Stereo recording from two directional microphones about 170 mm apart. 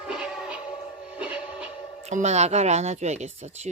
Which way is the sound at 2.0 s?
40° right (ahead or behind).